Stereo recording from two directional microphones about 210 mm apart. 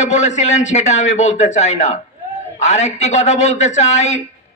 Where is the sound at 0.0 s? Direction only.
35° left (ahead or behind).